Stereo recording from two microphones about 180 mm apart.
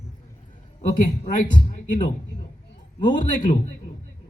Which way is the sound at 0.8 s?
40° left (ahead or behind).